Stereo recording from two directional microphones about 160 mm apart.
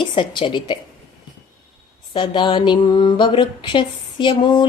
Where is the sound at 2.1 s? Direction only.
30° left (ahead or behind).